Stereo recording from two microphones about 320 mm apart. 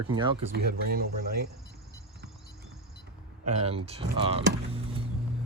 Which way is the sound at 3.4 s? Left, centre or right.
Centre.